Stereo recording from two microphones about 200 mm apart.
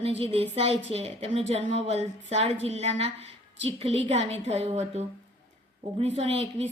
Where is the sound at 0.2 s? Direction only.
30° right (ahead or behind).